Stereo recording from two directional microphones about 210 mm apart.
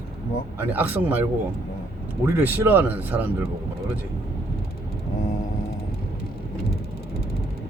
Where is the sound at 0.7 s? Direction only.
10° right (ahead or behind).